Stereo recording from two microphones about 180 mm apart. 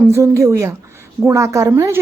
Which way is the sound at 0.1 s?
15° right (ahead or behind).